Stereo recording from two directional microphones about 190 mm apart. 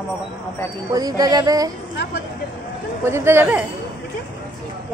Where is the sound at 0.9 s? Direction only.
20° right (ahead or behind).